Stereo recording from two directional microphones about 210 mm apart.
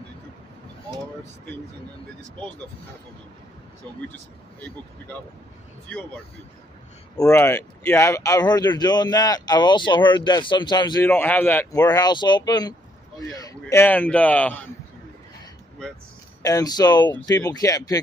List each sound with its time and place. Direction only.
7.2 s speech: 15° left (ahead or behind)
16.4 s speech: 15° left (ahead or behind)